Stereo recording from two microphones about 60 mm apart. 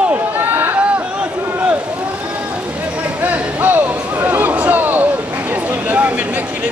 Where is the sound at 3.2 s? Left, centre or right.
Right.